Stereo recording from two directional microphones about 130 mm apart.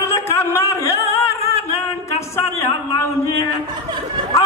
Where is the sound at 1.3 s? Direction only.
25° left (ahead or behind).